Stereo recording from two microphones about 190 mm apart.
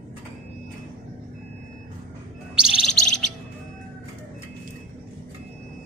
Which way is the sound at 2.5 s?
5° right (ahead or behind).